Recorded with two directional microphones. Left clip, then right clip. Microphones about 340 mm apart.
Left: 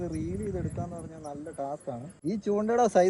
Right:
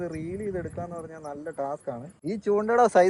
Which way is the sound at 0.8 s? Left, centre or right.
Centre.